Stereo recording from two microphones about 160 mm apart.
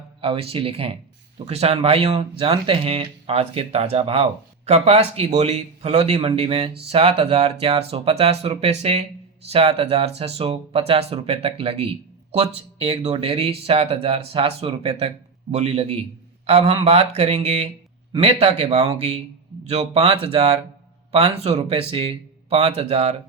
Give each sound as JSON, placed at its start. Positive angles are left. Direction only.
{"t": 0.2, "sound": "speech", "side_deg": -35}